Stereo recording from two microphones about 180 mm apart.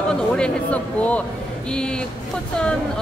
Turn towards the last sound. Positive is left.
turn(degrees=5)  # may be behind; listen again after turning